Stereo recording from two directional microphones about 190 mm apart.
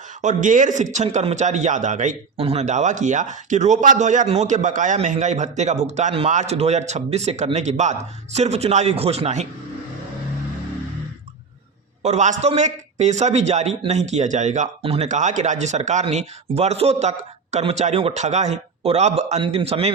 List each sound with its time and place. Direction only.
0.2 s a man's voice: 40° right (ahead or behind)
12.0 s a man's voice: 40° right (ahead or behind)